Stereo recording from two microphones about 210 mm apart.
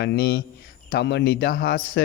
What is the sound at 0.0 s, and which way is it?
A man's voice, 50° left (ahead or behind).